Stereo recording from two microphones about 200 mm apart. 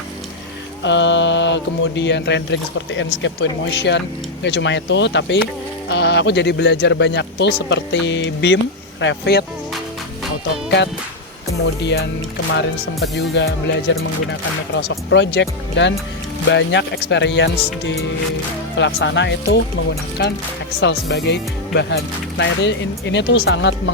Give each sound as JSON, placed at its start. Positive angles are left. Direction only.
{"t": 0.8, "sound": "speech", "side_deg": 65}
{"t": 11.8, "sound": "speech", "side_deg": 60}
{"t": 18.8, "sound": "speech", "side_deg": 65}